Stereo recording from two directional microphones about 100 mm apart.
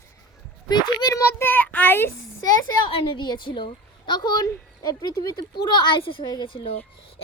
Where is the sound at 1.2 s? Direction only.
20° left (ahead or behind).